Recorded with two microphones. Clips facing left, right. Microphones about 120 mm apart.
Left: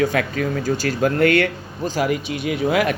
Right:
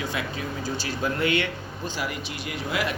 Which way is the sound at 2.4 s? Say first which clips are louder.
Left 9 dB; 65° left (ahead or behind).